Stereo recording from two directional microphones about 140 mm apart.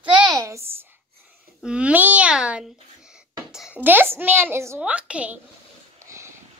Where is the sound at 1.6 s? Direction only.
10° right (ahead or behind).